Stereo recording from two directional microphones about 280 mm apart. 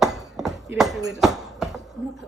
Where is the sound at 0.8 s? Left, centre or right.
Centre.